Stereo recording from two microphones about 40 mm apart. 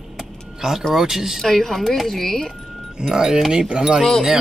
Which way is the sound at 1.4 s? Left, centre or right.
Centre.